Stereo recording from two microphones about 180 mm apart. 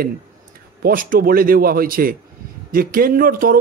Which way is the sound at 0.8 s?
50° right (ahead or behind).